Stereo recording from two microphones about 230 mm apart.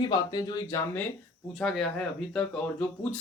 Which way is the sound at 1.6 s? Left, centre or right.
Centre.